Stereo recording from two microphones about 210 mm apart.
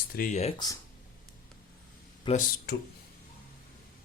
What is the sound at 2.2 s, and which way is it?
Speech, 40° left (ahead or behind).